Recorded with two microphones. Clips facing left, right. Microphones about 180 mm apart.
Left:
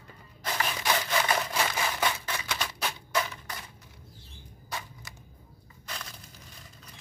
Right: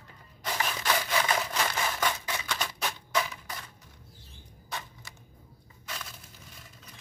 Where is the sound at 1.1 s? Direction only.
10° left (ahead or behind).